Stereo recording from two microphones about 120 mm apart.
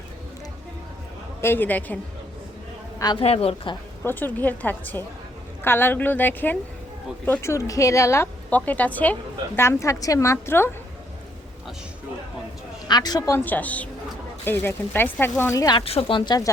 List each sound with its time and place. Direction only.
1.4 s speech: 20° left (ahead or behind)
3.2 s speech: 55° left (ahead or behind)
4.0 s a woman's voice: 15° left (ahead or behind)
9.6 s a woman's voice: 25° left (ahead or behind)
12.9 s a woman's voice: 35° left (ahead or behind)
13.4 s speech: 15° left (ahead or behind)
15.8 s speech: 55° left (ahead or behind); by 16.5 s 35° left (ahead or behind)